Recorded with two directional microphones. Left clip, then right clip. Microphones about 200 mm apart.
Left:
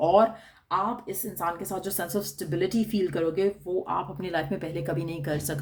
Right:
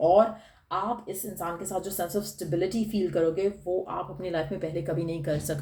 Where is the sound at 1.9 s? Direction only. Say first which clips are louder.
Even; 40° left (ahead or behind).